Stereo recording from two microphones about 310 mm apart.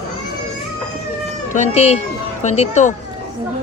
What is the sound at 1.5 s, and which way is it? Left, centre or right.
Speech, left.